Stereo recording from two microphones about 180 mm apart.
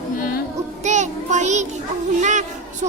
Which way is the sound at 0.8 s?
40° right (ahead or behind).